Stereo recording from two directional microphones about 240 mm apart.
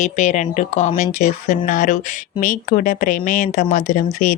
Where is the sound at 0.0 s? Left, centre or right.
Left.